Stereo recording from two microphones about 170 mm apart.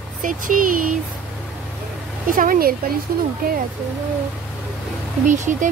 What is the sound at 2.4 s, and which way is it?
Speech, 55° right (ahead or behind).